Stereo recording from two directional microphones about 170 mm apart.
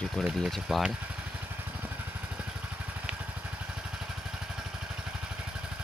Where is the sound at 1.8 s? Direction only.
5° right (ahead or behind).